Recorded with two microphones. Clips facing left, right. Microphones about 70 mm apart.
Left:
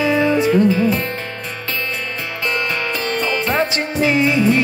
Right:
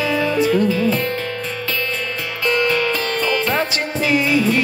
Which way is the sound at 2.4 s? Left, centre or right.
Left.